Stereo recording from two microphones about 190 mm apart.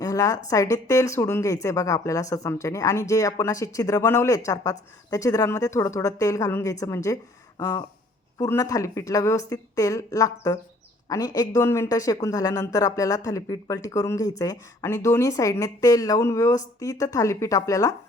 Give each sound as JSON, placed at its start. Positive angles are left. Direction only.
{"t": 0.0, "sound": "speech", "side_deg": 20}
{"t": 7.6, "sound": "a sound", "side_deg": 20}
{"t": 8.4, "sound": "speech", "side_deg": 15}